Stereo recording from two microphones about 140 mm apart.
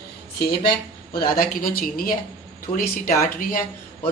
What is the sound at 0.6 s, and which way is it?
Speech, 90° left.